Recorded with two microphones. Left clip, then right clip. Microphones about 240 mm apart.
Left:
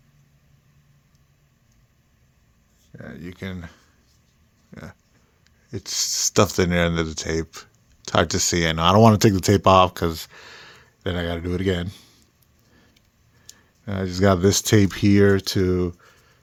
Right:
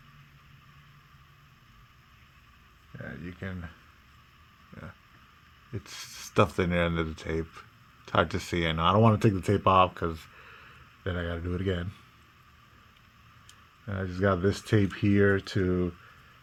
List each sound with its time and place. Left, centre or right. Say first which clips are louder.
3.0 s speech: left 4 dB; left
4.7 s a sound: left 6 dB; left
5.7 s speech: left 16 dB; left
13.8 s speech: left 8 dB; left